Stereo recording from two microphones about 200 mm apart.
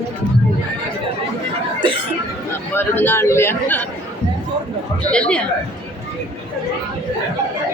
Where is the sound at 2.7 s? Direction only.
10° left (ahead or behind).